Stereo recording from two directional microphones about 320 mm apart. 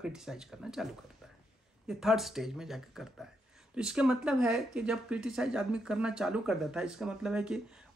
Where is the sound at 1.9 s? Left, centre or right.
Centre.